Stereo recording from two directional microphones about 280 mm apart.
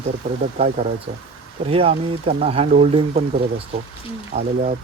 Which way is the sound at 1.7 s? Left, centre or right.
Centre.